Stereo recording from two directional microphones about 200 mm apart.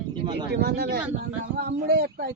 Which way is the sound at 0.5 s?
55° right (ahead or behind).